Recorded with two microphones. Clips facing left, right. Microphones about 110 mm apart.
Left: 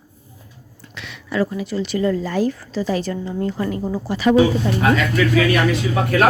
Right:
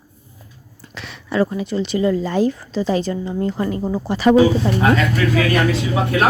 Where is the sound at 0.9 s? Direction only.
35° right (ahead or behind).